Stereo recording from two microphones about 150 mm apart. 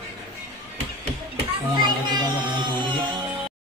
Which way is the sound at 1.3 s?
30° right (ahead or behind).